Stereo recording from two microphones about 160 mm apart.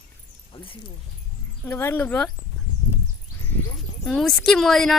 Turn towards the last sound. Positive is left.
turn(degrees=0)  # may be behind; listen again after turning